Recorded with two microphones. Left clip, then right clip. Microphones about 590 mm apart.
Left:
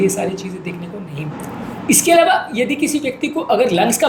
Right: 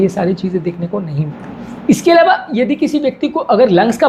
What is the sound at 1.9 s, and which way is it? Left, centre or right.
A woman's voice, right.